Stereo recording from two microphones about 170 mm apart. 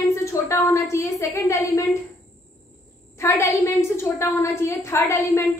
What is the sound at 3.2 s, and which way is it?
A woman's voice, 15° left (ahead or behind).